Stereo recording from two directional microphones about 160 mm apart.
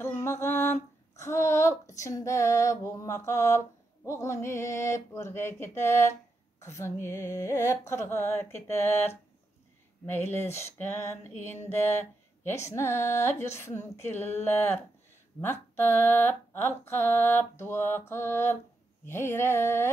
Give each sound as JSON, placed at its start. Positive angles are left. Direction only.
{"t": 0.0, "sound": "a sound", "side_deg": 15}
{"t": 6.6, "sound": "speech", "side_deg": 15}
{"t": 11.6, "sound": "speech", "side_deg": 15}